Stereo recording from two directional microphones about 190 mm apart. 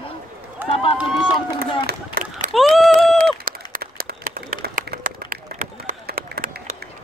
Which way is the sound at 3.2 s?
50° right (ahead or behind).